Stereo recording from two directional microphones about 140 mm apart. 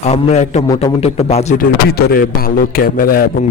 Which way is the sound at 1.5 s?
90° left.